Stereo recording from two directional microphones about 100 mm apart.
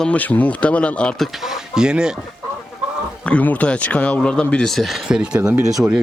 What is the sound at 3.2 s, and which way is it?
Speech, 15° left (ahead or behind).